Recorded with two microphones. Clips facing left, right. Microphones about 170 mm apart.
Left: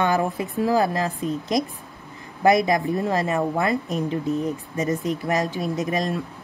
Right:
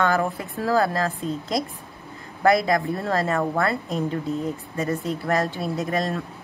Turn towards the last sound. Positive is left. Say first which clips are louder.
# left 1 dB
turn(degrees=15)  # may be behind; listen again after turning